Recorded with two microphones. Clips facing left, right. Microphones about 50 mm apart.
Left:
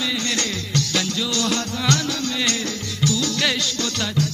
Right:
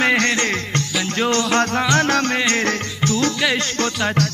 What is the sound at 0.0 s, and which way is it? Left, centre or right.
Music, right.